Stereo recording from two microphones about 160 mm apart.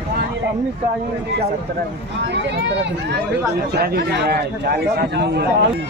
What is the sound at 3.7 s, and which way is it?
A man's voice, 75° right (ahead or behind).